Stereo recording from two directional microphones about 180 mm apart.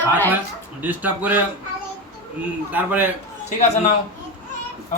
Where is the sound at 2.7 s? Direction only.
10° right (ahead or behind).